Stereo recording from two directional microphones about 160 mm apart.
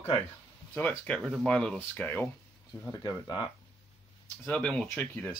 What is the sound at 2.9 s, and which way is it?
Speech, 25° left (ahead or behind).